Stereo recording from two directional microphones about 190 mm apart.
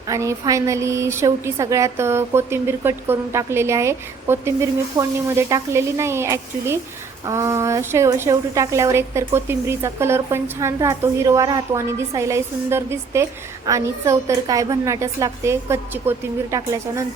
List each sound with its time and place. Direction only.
0.1 s a woman's voice: 15° right (ahead or behind)